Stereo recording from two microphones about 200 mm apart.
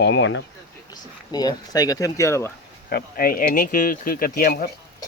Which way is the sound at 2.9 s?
45° left (ahead or behind).